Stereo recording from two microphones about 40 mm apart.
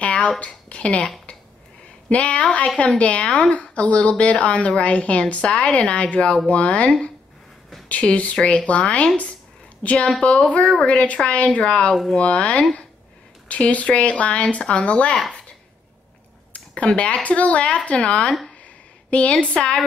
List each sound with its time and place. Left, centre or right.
0.0 s a woman's voice: left
7.9 s a woman's voice: left
16.5 s a woman's voice: left